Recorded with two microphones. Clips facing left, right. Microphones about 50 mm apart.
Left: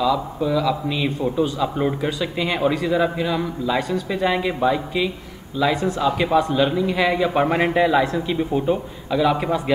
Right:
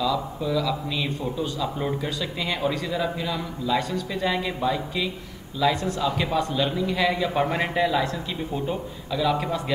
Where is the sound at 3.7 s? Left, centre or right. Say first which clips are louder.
Left 1 dB; centre.